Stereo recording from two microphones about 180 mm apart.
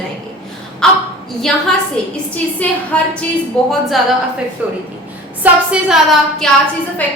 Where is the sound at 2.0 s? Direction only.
5° left (ahead or behind).